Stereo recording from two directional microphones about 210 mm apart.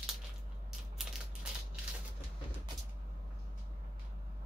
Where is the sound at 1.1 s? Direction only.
5° right (ahead or behind).